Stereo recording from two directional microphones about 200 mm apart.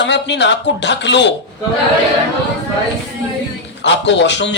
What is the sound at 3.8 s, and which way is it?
Speech, 65° left (ahead or behind).